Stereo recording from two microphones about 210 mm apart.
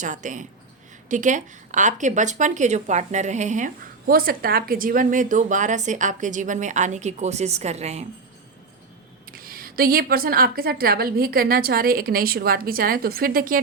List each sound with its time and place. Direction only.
0.0 s speech: 35° right (ahead or behind)
9.3 s a woman's voice: 45° right (ahead or behind)